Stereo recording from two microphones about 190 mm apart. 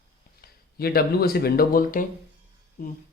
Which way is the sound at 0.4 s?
55° left (ahead or behind).